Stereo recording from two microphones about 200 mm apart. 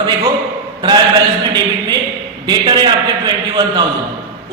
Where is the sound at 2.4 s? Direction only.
20° right (ahead or behind).